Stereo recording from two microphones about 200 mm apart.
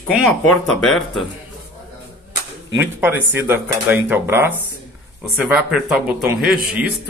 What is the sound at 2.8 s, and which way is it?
Speech, 10° right (ahead or behind).